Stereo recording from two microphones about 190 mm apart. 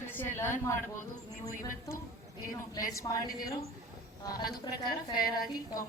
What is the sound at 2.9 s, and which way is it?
Speech, 15° left (ahead or behind).